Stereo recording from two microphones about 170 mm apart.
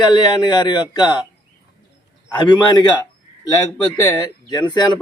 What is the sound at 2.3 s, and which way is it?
Speech, 25° left (ahead or behind).